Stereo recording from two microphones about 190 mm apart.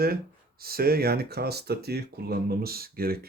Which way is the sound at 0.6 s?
55° right (ahead or behind).